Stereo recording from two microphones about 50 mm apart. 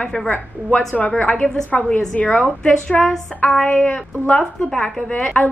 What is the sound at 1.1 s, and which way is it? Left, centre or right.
A woman's voice, left.